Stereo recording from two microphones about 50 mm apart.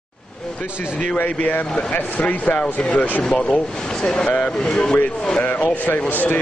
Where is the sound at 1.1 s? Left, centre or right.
Left.